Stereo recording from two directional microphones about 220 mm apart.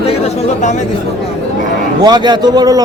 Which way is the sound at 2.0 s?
20° right (ahead or behind).